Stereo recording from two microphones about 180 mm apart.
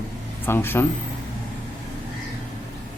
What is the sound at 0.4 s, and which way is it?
Speech, 10° left (ahead or behind).